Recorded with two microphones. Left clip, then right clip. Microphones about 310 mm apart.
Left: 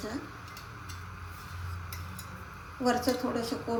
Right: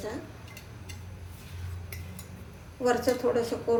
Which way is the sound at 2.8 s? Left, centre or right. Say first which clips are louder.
Right 4 dB; centre.